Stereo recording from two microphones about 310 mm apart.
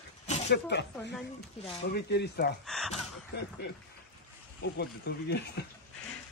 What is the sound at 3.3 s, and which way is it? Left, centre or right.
Speech, left.